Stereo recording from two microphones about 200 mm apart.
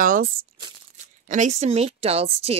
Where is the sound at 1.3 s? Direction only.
35° right (ahead or behind).